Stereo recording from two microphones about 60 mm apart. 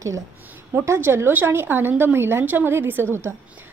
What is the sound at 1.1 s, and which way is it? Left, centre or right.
A woman's voice, right.